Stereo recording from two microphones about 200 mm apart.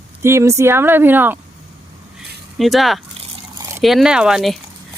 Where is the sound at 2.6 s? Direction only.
Centre (ahead or behind).